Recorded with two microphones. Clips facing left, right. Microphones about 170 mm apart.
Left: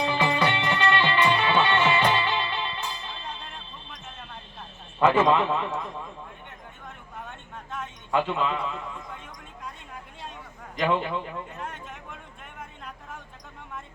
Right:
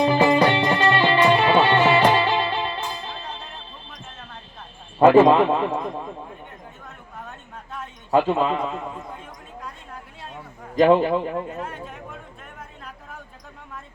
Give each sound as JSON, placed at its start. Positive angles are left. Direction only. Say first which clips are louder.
{"t": 0.0, "sound": "music", "louder": "right 8 dB", "side_deg": -40}
{"t": 4.9, "sound": "a man's voice", "louder": "right 7 dB", "side_deg": -40}
{"t": 7.3, "sound": "a sound", "louder": "right 1 dB", "side_deg": 0}
{"t": 8.1, "sound": "a man's voice", "louder": "right 6 dB", "side_deg": -40}
{"t": 10.8, "sound": "a man's voice", "louder": "right 10 dB", "side_deg": -40}